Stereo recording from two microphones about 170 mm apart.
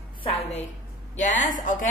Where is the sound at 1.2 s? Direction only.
45° left (ahead or behind).